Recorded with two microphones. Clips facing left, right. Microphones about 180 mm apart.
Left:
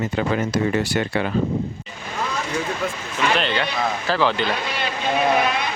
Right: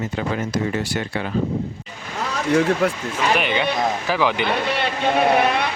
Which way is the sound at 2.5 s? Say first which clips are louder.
Right 9 dB; 70° right (ahead or behind).